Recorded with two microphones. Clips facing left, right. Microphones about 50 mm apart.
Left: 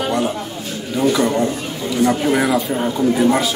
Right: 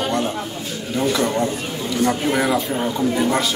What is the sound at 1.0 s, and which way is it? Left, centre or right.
A man's voice, centre.